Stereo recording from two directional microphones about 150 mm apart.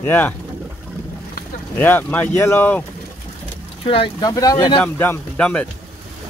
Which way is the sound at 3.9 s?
35° left (ahead or behind).